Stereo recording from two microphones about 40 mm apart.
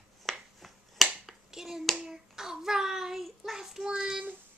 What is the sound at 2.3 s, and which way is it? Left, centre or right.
Speech, centre.